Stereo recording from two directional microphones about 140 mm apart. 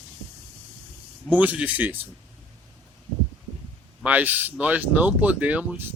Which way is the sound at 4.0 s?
10° right (ahead or behind).